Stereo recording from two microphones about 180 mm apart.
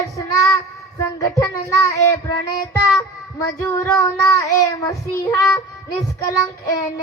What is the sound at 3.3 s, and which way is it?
Child singing, 20° left (ahead or behind).